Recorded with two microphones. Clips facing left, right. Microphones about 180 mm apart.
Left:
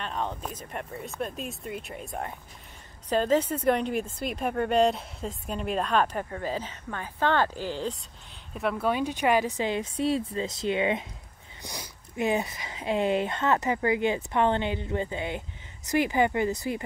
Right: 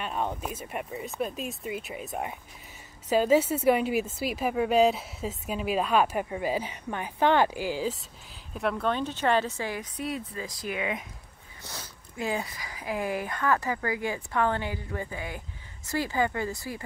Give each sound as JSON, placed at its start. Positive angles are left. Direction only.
{"t": 0.0, "sound": "speech", "side_deg": -10}
{"t": 8.5, "sound": "speech", "side_deg": 5}
{"t": 11.6, "sound": "speech", "side_deg": 15}